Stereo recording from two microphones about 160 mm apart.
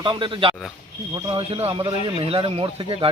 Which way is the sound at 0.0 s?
30° right (ahead or behind).